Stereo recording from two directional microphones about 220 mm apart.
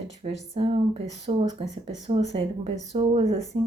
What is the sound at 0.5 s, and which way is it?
Speech, 25° right (ahead or behind).